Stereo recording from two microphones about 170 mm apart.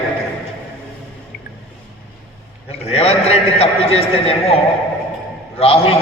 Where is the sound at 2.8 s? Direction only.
35° left (ahead or behind).